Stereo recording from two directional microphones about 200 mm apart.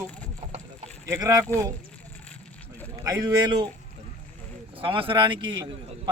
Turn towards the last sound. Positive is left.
turn(degrees=-25)  # may be behind; listen again after turning